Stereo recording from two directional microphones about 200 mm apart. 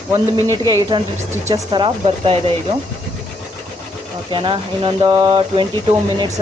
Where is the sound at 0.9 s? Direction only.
25° right (ahead or behind).